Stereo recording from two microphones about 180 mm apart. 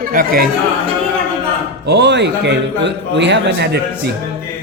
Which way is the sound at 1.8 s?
70° right (ahead or behind).